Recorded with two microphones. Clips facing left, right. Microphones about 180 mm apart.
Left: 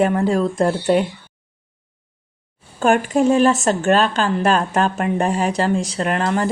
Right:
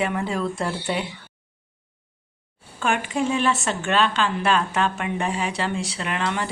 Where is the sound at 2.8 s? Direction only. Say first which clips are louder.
Left 8 dB; 45° left (ahead or behind).